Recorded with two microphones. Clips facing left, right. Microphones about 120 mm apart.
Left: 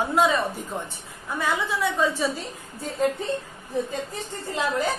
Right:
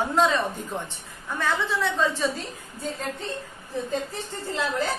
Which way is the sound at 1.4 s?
15° left (ahead or behind).